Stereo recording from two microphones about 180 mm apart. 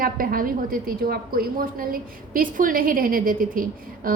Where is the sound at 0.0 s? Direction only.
50° right (ahead or behind).